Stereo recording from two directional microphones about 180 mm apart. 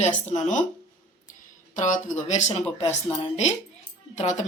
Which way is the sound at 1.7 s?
45° left (ahead or behind).